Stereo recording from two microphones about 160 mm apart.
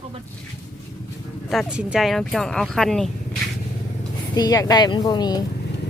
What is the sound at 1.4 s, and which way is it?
Speech, 5° right (ahead or behind).